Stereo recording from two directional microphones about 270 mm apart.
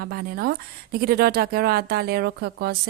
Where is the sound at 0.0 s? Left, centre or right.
Right.